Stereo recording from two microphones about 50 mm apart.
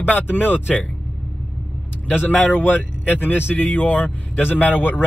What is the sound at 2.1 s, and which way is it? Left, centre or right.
Speech, left.